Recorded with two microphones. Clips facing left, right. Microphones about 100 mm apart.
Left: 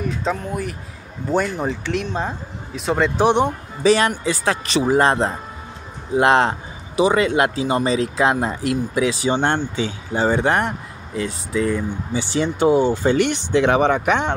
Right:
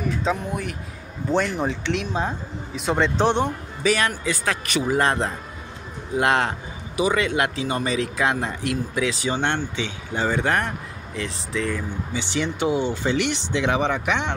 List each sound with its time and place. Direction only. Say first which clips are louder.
0.2 s speech: left 1 dB; centre (ahead or behind)
3.3 s speech: left 4 dB; 15° left (ahead or behind)
3.8 s speech: left 6 dB; 30° left (ahead or behind); by 14.3 s 45° left (ahead or behind)